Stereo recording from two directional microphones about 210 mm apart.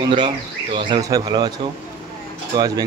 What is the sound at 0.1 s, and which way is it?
Speech, 25° right (ahead or behind).